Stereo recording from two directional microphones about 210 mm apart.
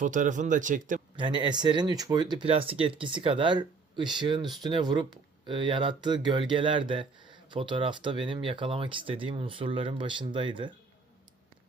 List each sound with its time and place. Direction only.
0.0 s speech: 40° right (ahead or behind)
1.1 s speech: 20° right (ahead or behind)